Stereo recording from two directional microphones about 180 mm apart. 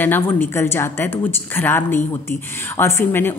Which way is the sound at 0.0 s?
10° left (ahead or behind).